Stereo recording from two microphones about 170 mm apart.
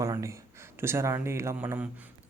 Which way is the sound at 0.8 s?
15° right (ahead or behind).